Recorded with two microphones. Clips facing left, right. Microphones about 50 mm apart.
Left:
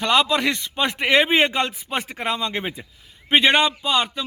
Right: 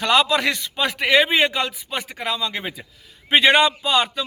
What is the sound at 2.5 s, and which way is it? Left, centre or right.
Speech, centre.